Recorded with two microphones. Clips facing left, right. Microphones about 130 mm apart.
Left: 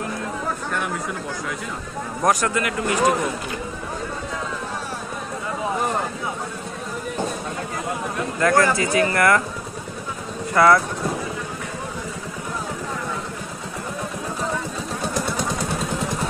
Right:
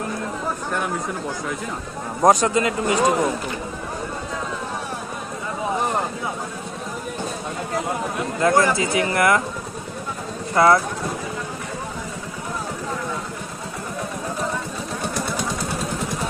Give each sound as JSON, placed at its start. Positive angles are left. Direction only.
{"t": 2.2, "sound": "speech", "side_deg": -25}
{"t": 8.4, "sound": "speech", "side_deg": -20}
{"t": 10.5, "sound": "speech", "side_deg": -25}